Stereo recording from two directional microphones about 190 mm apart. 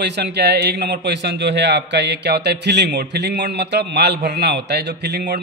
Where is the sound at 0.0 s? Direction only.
60° right (ahead or behind).